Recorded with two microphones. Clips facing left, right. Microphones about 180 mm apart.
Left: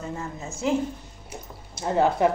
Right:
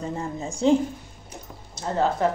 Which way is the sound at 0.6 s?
30° right (ahead or behind).